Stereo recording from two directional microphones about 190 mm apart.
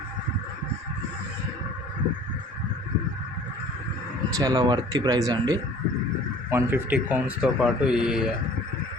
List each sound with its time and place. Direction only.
4.4 s speech: 20° right (ahead or behind); by 8.3 s 5° right (ahead or behind)